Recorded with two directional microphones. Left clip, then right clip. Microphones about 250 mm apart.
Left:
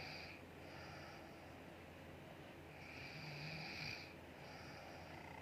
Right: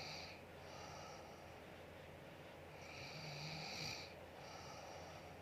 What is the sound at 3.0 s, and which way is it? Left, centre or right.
Vehicle, right.